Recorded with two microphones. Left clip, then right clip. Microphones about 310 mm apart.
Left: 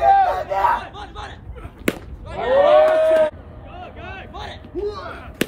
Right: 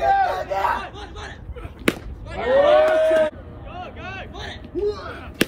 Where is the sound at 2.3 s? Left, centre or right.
Centre.